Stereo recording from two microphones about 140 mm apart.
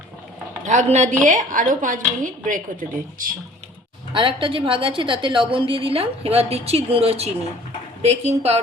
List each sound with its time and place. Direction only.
0.6 s a woman's voice: 60° right (ahead or behind)
4.1 s a woman's voice: 40° right (ahead or behind)